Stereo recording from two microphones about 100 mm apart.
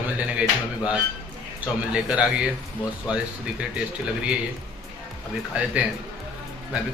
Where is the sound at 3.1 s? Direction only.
10° right (ahead or behind).